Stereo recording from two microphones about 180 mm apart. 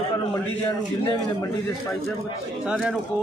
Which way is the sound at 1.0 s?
25° left (ahead or behind).